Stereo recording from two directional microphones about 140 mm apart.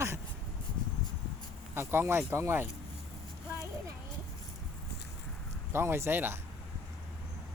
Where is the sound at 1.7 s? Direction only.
15° right (ahead or behind).